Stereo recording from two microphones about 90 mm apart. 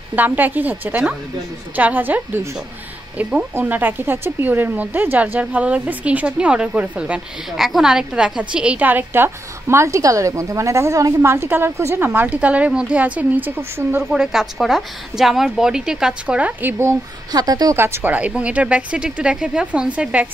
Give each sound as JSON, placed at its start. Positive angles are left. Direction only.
{"t": 0.1, "sound": "a woman's voice", "side_deg": -20}
{"t": 3.2, "sound": "a woman's voice", "side_deg": -10}
{"t": 3.5, "sound": "a woman's voice", "side_deg": -20}
{"t": 7.5, "sound": "a woman's voice", "side_deg": -5}
{"t": 11.1, "sound": "a woman's voice", "side_deg": -25}
{"t": 14.1, "sound": "a woman's voice", "side_deg": -5}
{"t": 17.3, "sound": "a woman's voice", "side_deg": -45}
{"t": 17.7, "sound": "a woman's voice", "side_deg": -25}